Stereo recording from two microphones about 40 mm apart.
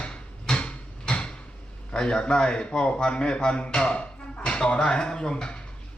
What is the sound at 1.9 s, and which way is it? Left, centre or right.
A man's voice, left.